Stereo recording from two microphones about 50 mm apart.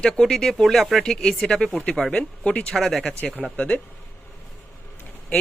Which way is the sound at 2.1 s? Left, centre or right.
Left.